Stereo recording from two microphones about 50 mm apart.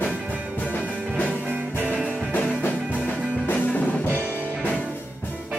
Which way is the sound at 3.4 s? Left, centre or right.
Left.